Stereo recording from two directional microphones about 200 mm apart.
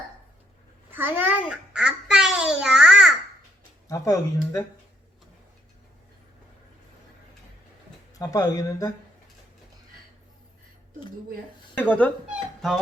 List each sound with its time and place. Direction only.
0.9 s a child's voice: 10° right (ahead or behind)
3.8 s speech: 15° left (ahead or behind)
8.1 s speech: 20° left (ahead or behind)
11.8 s speech: 5° left (ahead or behind)